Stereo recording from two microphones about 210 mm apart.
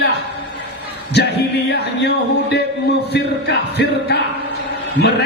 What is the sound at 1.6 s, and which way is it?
Speech, 50° left (ahead or behind).